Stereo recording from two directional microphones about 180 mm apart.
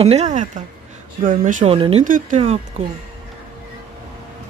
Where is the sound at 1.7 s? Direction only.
30° right (ahead or behind).